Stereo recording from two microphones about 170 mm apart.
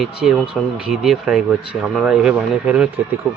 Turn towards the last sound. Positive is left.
turn(degrees=-5)  # may be behind; listen again after turning